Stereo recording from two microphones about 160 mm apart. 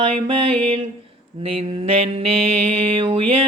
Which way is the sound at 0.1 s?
35° right (ahead or behind).